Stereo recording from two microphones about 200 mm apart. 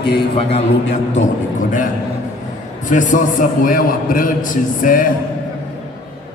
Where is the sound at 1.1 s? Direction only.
40° left (ahead or behind).